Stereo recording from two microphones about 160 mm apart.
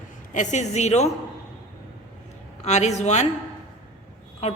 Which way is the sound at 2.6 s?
45° left (ahead or behind).